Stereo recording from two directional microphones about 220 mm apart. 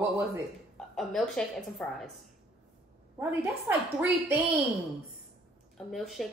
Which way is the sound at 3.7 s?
10° right (ahead or behind).